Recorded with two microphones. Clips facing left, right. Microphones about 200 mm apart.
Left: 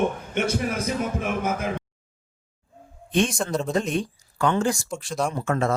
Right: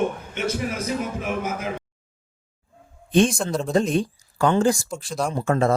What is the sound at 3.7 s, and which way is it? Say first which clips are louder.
Speech: right 4 dB; 35° right (ahead or behind).